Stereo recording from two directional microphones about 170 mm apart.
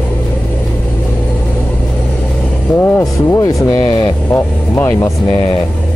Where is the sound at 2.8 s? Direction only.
15° left (ahead or behind).